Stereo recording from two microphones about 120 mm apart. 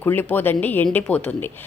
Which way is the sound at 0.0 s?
15° left (ahead or behind).